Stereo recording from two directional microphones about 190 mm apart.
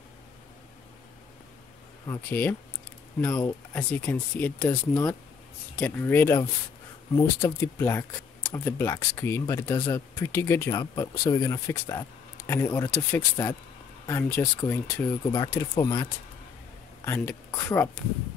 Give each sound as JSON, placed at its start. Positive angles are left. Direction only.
{"t": 2.0, "sound": "speech", "side_deg": 10}